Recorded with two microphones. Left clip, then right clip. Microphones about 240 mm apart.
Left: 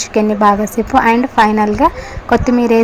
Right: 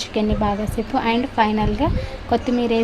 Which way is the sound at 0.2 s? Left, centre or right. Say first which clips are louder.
Left 11 dB; centre.